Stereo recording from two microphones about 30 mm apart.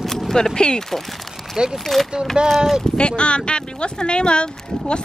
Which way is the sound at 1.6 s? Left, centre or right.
Right.